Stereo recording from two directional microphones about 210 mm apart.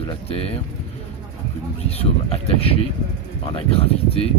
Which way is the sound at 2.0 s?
30° left (ahead or behind).